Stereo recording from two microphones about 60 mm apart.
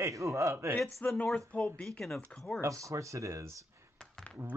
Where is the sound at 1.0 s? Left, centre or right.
Left.